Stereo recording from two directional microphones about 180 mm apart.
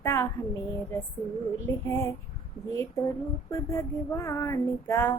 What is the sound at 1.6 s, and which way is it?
Speech, 15° left (ahead or behind).